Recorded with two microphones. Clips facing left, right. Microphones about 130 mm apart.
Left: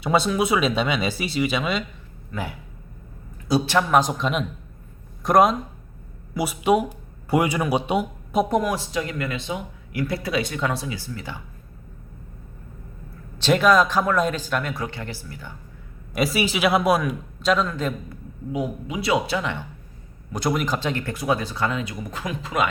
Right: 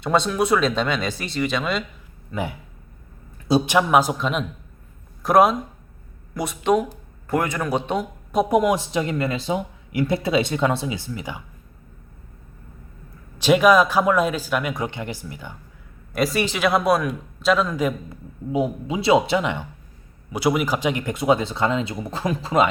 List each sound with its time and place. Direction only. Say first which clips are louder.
0.0 s speech: even; 5° left (ahead or behind)
2.3 s speech: right 3 dB; 20° right (ahead or behind); by 8.0 s 10° left (ahead or behind)
8.4 s speech: right 4 dB; 15° right (ahead or behind); by 9.6 s 35° right (ahead or behind)
9.9 s speech: right 4 dB; 25° right (ahead or behind)
13.4 s speech: right 2 dB; 10° right (ahead or behind)
16.1 s speech: right 1 dB; 5° left (ahead or behind)
18.5 s speech: right 4 dB; 25° right (ahead or behind)
20.3 s speech: right 3 dB; 10° right (ahead or behind); by 22.7 s 30° right (ahead or behind)